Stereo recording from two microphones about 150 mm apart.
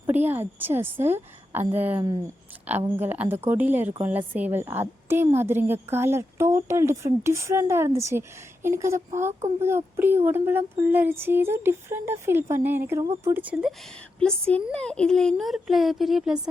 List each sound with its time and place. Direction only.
0.1 s a woman's voice: 10° right (ahead or behind)
2.0 s speech: 20° right (ahead or behind)
2.9 s a woman's voice: 10° right (ahead or behind)
14.2 s speech: 5° left (ahead or behind)